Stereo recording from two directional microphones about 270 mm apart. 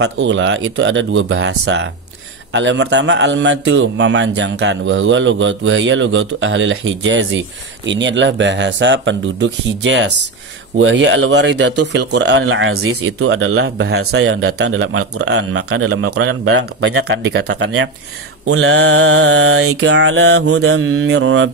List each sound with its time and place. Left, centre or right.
0.0 s speech: right
17.5 s speech: right